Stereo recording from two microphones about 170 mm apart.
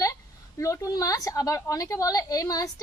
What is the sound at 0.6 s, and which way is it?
A woman's voice, 20° left (ahead or behind).